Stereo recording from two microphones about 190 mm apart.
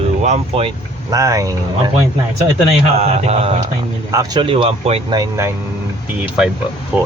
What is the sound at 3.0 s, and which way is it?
Mantra, 35° right (ahead or behind).